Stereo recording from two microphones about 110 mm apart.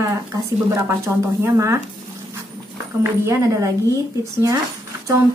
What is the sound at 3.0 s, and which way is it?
Speech, 25° right (ahead or behind).